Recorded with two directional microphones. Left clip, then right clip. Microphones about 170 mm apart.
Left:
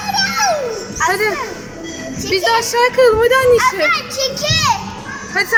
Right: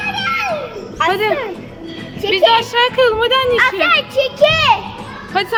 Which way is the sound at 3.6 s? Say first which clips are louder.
Right 1 dB; 55° right (ahead or behind).